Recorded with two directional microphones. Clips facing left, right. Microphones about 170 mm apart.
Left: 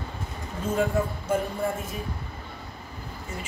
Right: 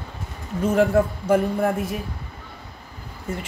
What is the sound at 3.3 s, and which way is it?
Speech, 50° right (ahead or behind).